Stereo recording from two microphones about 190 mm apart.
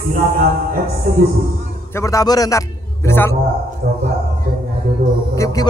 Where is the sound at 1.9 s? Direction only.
15° left (ahead or behind).